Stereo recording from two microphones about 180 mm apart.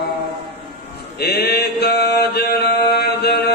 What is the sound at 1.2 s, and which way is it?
Mantra, 65° left (ahead or behind).